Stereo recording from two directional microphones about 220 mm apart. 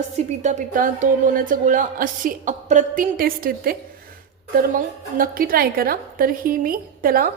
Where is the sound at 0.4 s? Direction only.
35° right (ahead or behind).